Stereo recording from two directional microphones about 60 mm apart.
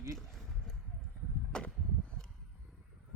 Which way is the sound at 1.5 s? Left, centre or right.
Centre.